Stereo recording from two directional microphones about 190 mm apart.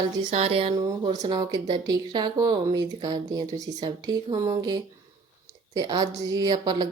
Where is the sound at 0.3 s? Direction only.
30° right (ahead or behind).